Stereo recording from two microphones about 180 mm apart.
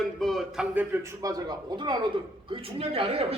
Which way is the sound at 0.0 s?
Centre (ahead or behind).